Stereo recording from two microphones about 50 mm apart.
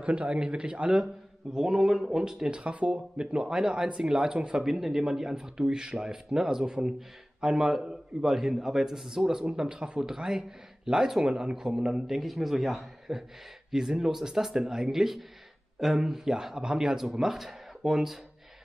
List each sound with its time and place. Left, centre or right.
0.0 s a man's voice: right
2.6 s a man's voice: right
4.7 s a man's voice: centre
12.2 s a man's voice: centre